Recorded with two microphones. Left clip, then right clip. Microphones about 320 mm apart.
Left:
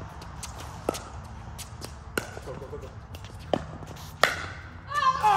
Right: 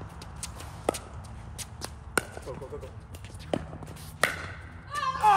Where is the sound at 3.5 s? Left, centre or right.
Centre.